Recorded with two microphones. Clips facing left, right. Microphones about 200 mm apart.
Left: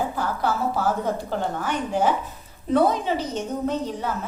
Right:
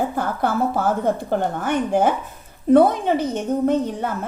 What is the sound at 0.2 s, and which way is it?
A woman's voice, 55° right (ahead or behind).